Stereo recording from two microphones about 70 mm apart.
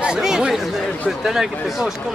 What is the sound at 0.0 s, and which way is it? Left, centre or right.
Chatter, centre.